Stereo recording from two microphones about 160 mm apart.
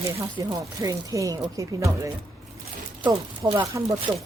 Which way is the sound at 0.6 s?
20° right (ahead or behind).